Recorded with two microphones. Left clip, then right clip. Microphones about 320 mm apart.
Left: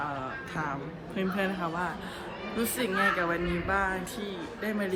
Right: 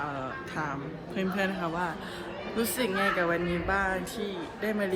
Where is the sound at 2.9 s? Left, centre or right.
Right.